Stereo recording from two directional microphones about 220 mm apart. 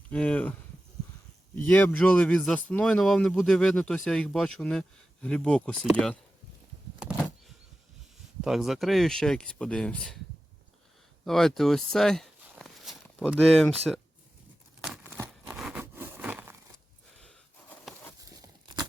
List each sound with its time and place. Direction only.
0.1 s speech: 5° left (ahead or behind)
1.7 s speech: 5° left (ahead or behind)
8.4 s speech: centre (ahead or behind)
11.3 s speech: centre (ahead or behind)
14.8 s a sound: centre (ahead or behind)
18.4 s a sound: 15° right (ahead or behind)